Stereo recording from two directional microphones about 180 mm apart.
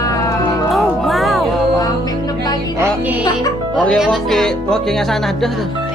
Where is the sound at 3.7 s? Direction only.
Centre (ahead or behind).